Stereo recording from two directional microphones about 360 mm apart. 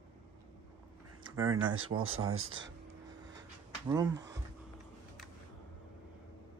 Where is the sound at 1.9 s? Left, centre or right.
Right.